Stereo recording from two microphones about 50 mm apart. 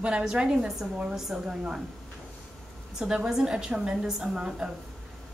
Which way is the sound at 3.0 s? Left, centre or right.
Centre.